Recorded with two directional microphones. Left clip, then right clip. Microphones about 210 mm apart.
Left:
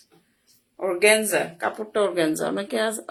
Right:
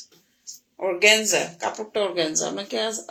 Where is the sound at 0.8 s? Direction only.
5° left (ahead or behind).